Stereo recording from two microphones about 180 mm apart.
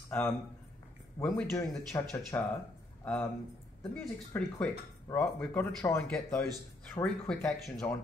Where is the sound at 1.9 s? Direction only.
15° left (ahead or behind).